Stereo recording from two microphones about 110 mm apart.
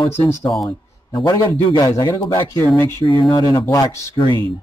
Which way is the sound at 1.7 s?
35° left (ahead or behind).